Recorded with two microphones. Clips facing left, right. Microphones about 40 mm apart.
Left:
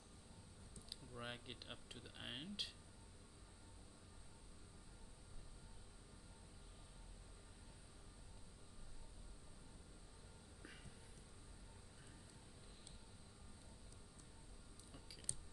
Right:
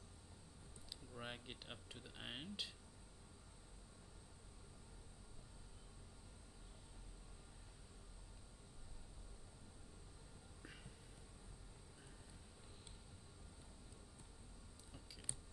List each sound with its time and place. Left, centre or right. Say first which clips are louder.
1.1 s speech: even; centre